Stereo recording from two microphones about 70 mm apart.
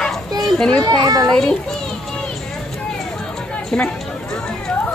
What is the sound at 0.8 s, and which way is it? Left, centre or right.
Speech, right.